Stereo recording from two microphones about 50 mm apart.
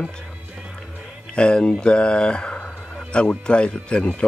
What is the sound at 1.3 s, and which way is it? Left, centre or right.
Speech, centre.